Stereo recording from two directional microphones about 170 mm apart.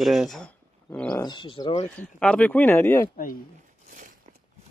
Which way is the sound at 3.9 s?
50° right (ahead or behind).